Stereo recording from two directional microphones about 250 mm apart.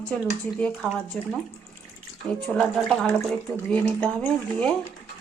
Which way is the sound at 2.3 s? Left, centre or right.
Centre.